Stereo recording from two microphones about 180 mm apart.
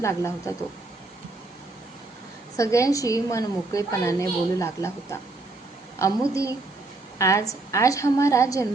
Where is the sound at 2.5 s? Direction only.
15° left (ahead or behind).